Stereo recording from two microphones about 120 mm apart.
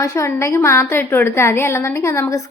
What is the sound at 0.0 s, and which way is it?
A woman's voice, 25° left (ahead or behind).